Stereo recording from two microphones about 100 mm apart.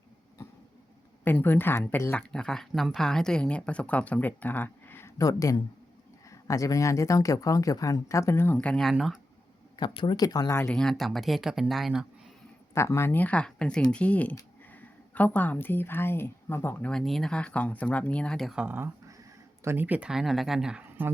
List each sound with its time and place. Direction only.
1.2 s speech: 20° left (ahead or behind)
2.1 s speech: 5° left (ahead or behind); by 8.5 s 25° left (ahead or behind)
8.5 s speech: 5° left (ahead or behind)
9.7 s speech: 55° left (ahead or behind)
10.2 s speech: 40° left (ahead or behind)
10.7 s speech: 5° left (ahead or behind)
12.7 s a woman's voice: 25° left (ahead or behind)
16.9 s speech: 5° left (ahead or behind)
18.5 s speech: 15° right (ahead or behind)